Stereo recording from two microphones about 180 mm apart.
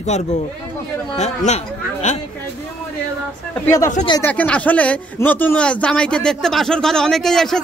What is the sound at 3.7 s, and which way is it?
A man's voice, 15° left (ahead or behind).